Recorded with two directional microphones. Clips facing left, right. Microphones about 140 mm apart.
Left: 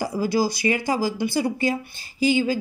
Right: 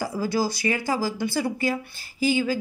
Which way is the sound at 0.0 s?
15° left (ahead or behind).